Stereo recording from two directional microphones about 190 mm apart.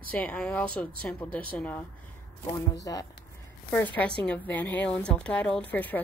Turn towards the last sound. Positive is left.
turn(degrees=10)  # may be behind; listen again after turning